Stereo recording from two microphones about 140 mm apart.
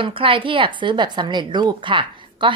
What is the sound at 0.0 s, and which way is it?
A woman's voice, 40° right (ahead or behind).